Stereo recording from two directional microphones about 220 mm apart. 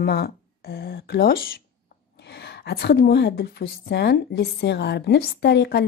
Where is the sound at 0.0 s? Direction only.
45° left (ahead or behind).